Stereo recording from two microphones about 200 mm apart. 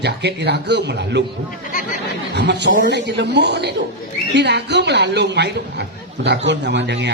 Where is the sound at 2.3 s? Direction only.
60° right (ahead or behind).